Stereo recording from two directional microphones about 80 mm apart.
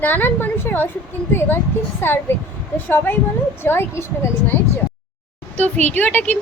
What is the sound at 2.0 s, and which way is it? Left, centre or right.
Speech, left.